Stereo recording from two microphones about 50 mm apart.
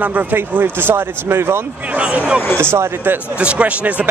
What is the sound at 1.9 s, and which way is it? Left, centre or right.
Speech, right.